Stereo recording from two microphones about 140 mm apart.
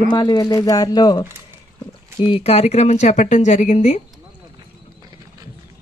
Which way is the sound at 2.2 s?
45° left (ahead or behind).